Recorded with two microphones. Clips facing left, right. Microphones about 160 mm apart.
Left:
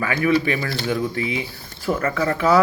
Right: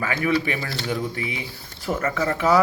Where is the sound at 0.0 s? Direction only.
25° right (ahead or behind).